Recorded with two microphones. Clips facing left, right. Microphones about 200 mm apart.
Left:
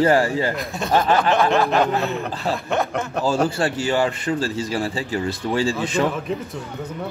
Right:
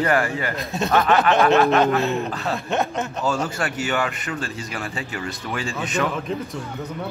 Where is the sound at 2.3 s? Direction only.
30° left (ahead or behind).